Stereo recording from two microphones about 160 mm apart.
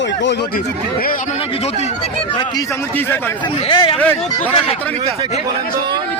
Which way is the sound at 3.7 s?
30° left (ahead or behind).